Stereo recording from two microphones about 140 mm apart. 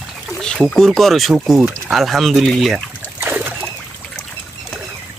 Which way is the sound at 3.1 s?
10° right (ahead or behind).